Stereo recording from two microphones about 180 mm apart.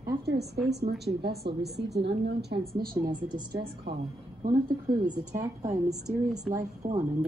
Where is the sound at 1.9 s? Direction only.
65° right (ahead or behind).